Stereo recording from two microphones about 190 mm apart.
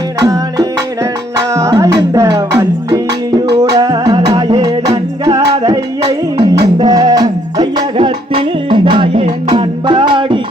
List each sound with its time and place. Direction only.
0.2 s music: 20° right (ahead or behind)